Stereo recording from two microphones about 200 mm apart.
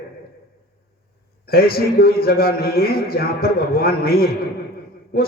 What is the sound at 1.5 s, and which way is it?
A man's voice, 50° left (ahead or behind).